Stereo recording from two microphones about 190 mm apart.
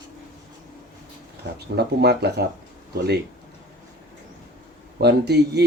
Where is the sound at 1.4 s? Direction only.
65° right (ahead or behind).